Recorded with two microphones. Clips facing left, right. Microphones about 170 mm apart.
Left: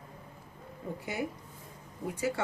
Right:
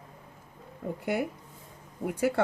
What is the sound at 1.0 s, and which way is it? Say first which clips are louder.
Speech: right 6 dB; 60° right (ahead or behind).